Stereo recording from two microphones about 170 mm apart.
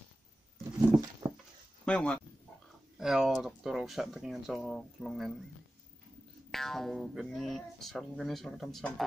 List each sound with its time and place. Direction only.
1.2 s a sound: 25° right (ahead or behind)
1.9 s speech: 5° left (ahead or behind)
6.5 s speech: centre (ahead or behind)